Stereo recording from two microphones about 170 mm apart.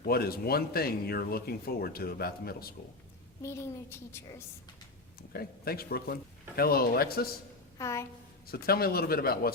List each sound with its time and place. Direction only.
0.0 s speech: 65° left (ahead or behind)
3.4 s a woman's voice: 15° left (ahead or behind)
5.3 s speech: 65° left (ahead or behind)
7.8 s a woman's voice: 15° left (ahead or behind)
8.4 s speech: 65° left (ahead or behind)